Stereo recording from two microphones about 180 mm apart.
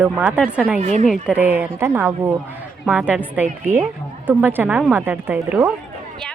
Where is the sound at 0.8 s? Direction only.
40° right (ahead or behind).